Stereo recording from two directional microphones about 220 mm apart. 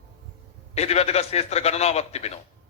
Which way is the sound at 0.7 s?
30° left (ahead or behind).